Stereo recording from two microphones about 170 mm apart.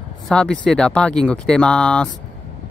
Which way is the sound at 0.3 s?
5° left (ahead or behind).